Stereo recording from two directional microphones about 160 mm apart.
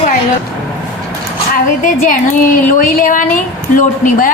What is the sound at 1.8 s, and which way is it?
A woman's voice, 55° left (ahead or behind).